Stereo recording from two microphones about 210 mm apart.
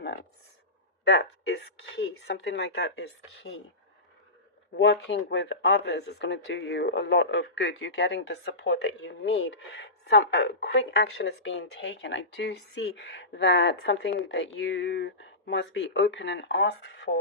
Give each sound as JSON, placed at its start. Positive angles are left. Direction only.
{"t": 1.0, "sound": "speech", "side_deg": 50}
{"t": 4.8, "sound": "speech", "side_deg": 60}